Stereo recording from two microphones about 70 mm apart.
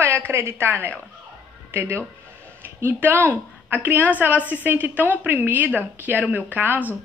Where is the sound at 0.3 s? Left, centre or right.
Right.